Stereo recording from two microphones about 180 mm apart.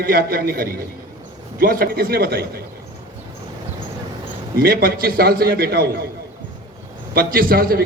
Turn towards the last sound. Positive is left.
turn(degrees=-55)  # may be behind; listen again after turning